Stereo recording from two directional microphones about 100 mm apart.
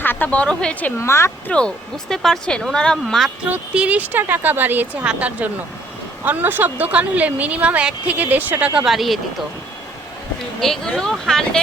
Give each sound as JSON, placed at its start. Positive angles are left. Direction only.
{"t": 0.0, "sound": "speech", "side_deg": 20}
{"t": 0.9, "sound": "speech", "side_deg": 30}
{"t": 1.5, "sound": "speech", "side_deg": 10}
{"t": 3.5, "sound": "a woman's voice", "side_deg": -15}
{"t": 10.6, "sound": "speech", "side_deg": 5}